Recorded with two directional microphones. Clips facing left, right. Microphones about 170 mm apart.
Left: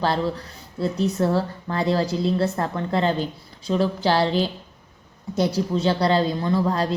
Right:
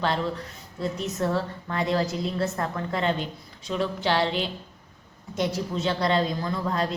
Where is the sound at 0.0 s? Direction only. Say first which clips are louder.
Left 3 dB; 35° left (ahead or behind).